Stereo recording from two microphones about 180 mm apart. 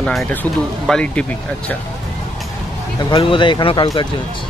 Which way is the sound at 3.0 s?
25° left (ahead or behind).